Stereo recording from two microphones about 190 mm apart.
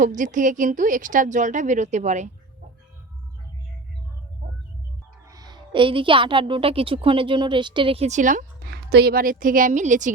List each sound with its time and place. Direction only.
0.0 s a woman's voice: 40° right (ahead or behind)
5.3 s a woman's voice: 20° right (ahead or behind); by 10.1 s 40° right (ahead or behind)